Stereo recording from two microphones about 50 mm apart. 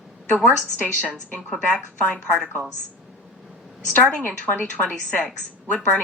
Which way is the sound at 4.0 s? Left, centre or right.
Left.